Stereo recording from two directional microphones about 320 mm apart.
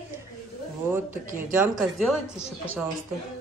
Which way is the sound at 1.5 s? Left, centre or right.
Centre.